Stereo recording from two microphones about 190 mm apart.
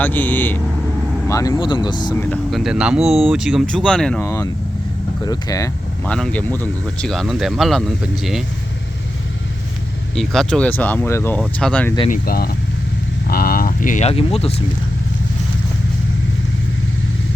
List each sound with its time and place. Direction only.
0.0 s speech: 10° left (ahead or behind)
2.1 s speech: 5° left (ahead or behind)
6.1 s speech: 5° left (ahead or behind)
10.2 s speech: centre (ahead or behind)
12.1 s speech: 50° left (ahead or behind); by 14.5 s 30° left (ahead or behind)